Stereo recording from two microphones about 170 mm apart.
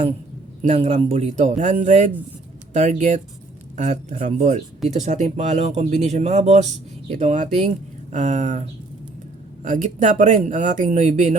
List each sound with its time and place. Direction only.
0.6 s speech: 40° right (ahead or behind)
9.6 s speech: 45° right (ahead or behind)